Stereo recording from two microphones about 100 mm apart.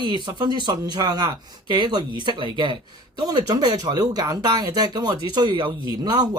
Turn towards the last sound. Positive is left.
turn(degrees=-45)  # may be behind; listen again after turning